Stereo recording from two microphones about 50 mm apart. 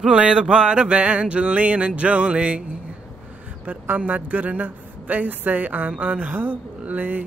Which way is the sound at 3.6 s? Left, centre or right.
Right.